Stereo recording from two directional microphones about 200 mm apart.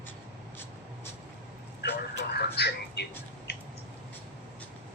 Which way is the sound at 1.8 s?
55° left (ahead or behind).